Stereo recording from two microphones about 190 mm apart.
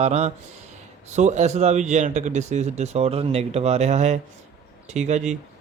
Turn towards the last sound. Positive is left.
turn(degrees=-35)  # may be behind; listen again after turning